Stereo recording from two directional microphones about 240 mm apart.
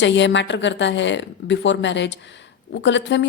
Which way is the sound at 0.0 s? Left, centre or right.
Left.